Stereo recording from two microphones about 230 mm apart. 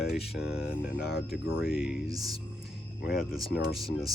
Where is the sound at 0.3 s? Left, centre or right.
Centre.